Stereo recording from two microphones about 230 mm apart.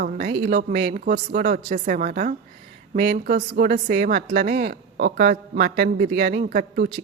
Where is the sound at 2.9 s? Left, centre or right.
Right.